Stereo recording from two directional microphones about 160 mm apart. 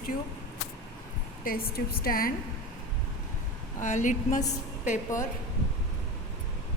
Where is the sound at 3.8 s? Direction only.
50° left (ahead or behind).